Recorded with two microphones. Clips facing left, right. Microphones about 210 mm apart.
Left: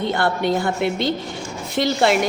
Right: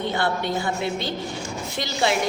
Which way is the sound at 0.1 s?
65° left (ahead or behind).